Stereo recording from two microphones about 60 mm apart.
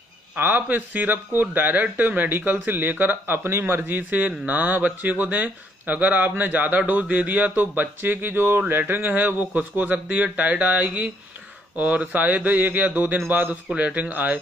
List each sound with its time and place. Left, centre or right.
0.4 s speech: right